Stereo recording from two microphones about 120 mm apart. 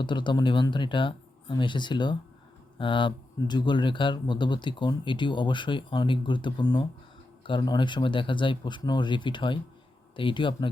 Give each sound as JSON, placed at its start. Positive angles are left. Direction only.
{"t": 0.0, "sound": "speech", "side_deg": 40}